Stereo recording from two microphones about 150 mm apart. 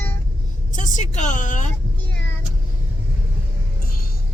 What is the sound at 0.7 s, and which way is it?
A woman's voice, 55° left (ahead or behind).